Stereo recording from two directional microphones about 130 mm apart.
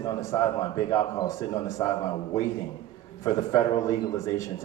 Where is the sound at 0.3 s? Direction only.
25° left (ahead or behind).